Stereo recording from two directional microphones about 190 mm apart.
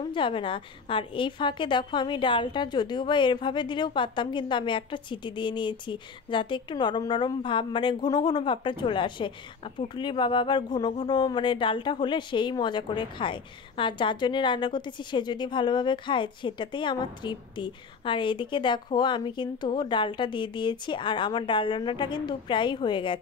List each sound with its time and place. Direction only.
0.0 s speech: 25° left (ahead or behind)